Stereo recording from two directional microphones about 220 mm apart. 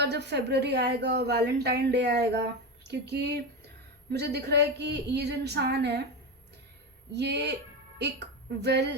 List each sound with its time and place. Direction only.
0.0 s a woman's voice: 50° right (ahead or behind)
7.1 s a woman's voice: 50° right (ahead or behind)